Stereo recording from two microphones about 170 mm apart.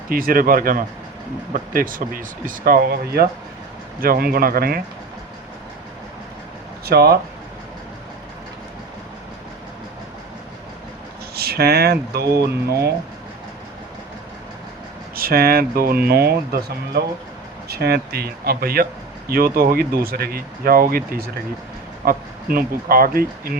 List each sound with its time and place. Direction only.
0.1 s speech: 55° right (ahead or behind)
6.8 s speech: 65° right (ahead or behind)
11.3 s speech: 65° right (ahead or behind)
15.1 s speech: 60° right (ahead or behind)